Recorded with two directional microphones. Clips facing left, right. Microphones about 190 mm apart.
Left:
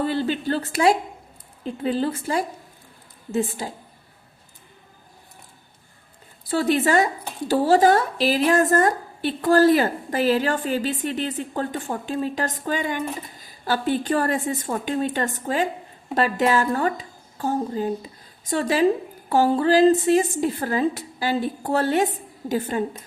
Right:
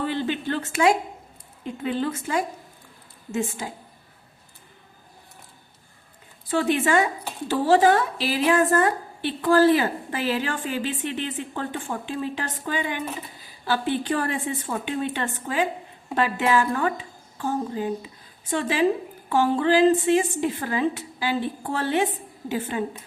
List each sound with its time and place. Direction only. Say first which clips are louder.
0.0 s speech: left 3 dB; 40° left (ahead or behind)
6.5 s a woman's voice: left 2 dB; 35° left (ahead or behind)